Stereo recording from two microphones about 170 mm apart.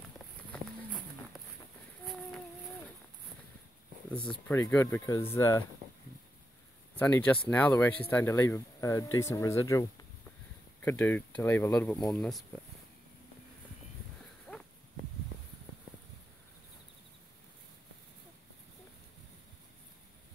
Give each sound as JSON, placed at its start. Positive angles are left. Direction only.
{"t": 0.5, "sound": "horse", "side_deg": 10}
{"t": 2.0, "sound": "a sound", "side_deg": 0}
{"t": 4.3, "sound": "speech", "side_deg": 15}
{"t": 7.0, "sound": "speech", "side_deg": 10}
{"t": 12.1, "sound": "speech", "side_deg": 0}
{"t": 14.5, "sound": "a sound", "side_deg": 5}